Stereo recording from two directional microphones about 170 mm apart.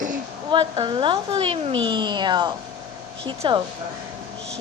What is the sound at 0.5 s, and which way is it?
A woman's voice, 30° right (ahead or behind).